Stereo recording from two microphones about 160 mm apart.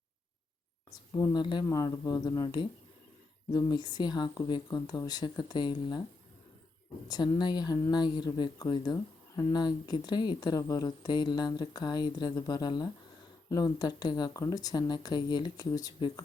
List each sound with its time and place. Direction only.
1.1 s speech: 25° left (ahead or behind)
7.1 s speech: 25° left (ahead or behind)